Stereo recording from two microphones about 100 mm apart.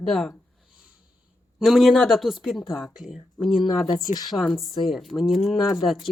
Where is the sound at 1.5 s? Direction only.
Centre (ahead or behind).